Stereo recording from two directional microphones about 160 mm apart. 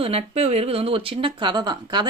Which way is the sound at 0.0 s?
40° right (ahead or behind).